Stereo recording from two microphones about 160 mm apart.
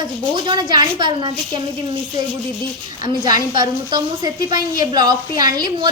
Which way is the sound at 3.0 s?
25° right (ahead or behind).